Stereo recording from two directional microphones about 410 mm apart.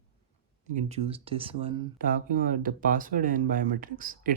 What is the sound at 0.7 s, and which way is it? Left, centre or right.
Speech, centre.